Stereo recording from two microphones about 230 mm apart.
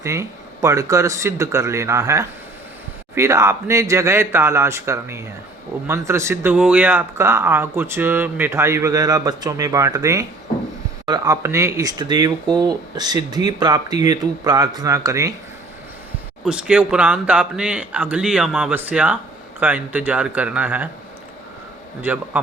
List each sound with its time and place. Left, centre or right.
0.0 s speech: centre
16.4 s speech: centre
22.0 s speech: centre